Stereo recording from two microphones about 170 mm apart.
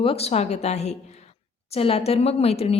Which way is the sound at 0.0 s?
35° left (ahead or behind).